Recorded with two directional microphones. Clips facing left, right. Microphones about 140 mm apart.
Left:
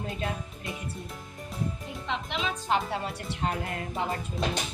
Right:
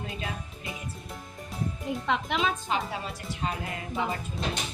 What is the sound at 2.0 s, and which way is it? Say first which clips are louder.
Speech: right 4 dB; 50° right (ahead or behind).